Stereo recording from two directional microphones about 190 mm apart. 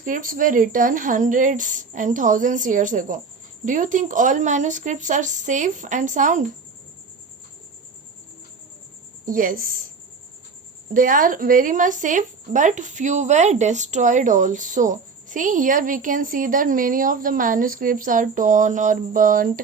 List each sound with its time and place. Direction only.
0.0 s a woman's voice: 45° right (ahead or behind)
9.2 s a woman's voice: 45° right (ahead or behind)
10.9 s a woman's voice: 45° right (ahead or behind)